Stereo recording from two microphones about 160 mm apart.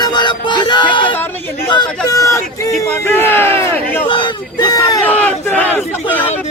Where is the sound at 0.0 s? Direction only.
30° left (ahead or behind).